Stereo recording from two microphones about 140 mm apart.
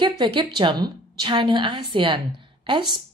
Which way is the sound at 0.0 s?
35° right (ahead or behind).